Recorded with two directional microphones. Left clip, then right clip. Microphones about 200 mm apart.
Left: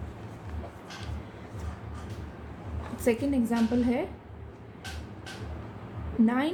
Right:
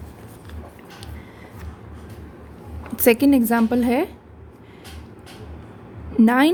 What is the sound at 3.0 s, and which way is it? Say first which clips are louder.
A woman's voice: right 11 dB; 50° right (ahead or behind).